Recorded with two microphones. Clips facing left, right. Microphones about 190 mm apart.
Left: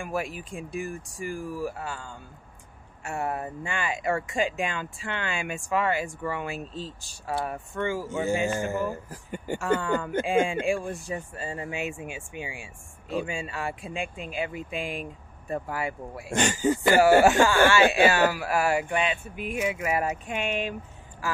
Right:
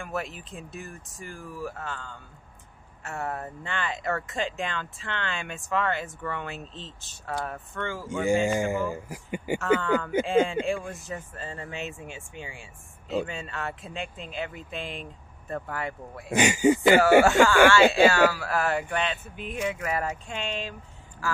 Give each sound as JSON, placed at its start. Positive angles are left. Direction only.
{"t": 0.0, "sound": "speech", "side_deg": 10}
{"t": 8.5, "sound": "speech", "side_deg": -15}
{"t": 9.8, "sound": "speech", "side_deg": 15}
{"t": 16.3, "sound": "speech", "side_deg": -10}
{"t": 17.2, "sound": "speech", "side_deg": 15}